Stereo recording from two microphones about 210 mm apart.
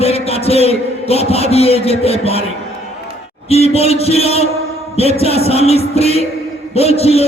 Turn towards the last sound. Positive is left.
turn(degrees=30)  # may be behind; listen again after turning